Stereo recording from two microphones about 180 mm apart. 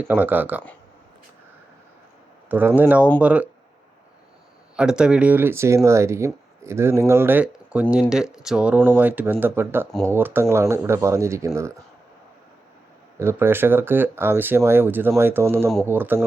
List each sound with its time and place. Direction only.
0.0 s speech: 10° right (ahead or behind)
2.5 s speech: 10° right (ahead or behind)
4.8 s speech: 5° right (ahead or behind)
13.1 s speech: 15° right (ahead or behind)